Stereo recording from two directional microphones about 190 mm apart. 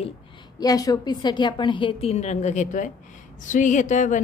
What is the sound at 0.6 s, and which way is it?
A woman's voice, 20° left (ahead or behind).